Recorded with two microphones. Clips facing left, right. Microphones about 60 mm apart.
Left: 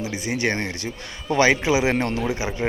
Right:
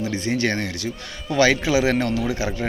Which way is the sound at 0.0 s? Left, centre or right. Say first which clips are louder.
Right 2 dB; centre.